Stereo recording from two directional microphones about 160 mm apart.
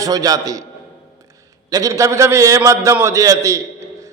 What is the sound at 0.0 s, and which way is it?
Speech, 25° right (ahead or behind).